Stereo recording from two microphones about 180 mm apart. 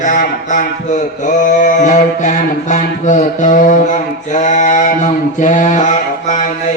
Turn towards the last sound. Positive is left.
turn(degrees=45)  # may be behind; listen again after turning